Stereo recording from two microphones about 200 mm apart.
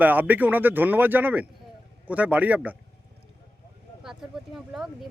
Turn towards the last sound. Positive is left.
turn(degrees=0)  # may be behind; listen again after turning